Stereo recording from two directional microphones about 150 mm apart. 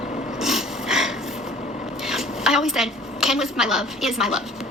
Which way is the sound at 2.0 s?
5° right (ahead or behind).